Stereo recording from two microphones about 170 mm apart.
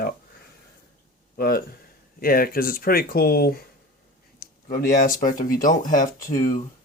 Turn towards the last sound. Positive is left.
turn(degrees=55)  # may be behind; listen again after turning